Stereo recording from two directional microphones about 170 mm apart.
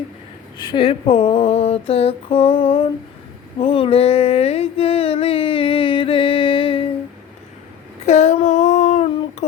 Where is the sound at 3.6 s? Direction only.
35° left (ahead or behind).